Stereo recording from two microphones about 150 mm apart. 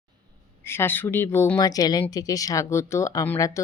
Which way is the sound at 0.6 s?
15° left (ahead or behind).